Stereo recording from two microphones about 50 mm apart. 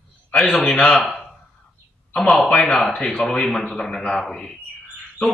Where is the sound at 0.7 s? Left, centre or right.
Centre.